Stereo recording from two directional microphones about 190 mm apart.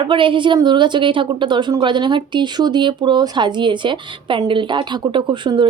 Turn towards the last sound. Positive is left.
turn(degrees=-25)  # may be behind; listen again after turning